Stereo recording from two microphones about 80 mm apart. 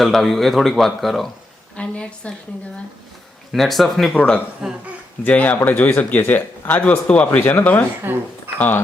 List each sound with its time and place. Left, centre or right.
0.0 s speech: centre
1.7 s a woman's voice: centre
3.5 s speech: centre
4.1 s speech: centre
4.6 s speech: centre
5.2 s speech: centre
8.1 s speech: right
8.5 s speech: left